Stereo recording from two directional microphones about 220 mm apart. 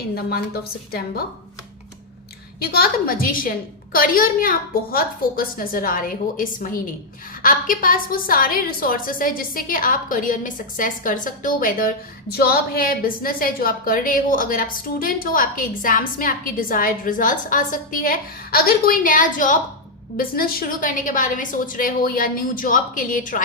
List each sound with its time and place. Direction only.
0.3 s a woman's voice: 45° left (ahead or behind)
2.6 s a woman's voice: 45° left (ahead or behind)